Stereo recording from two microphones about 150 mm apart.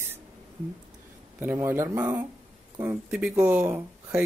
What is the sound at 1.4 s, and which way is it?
Speech, 15° right (ahead or behind).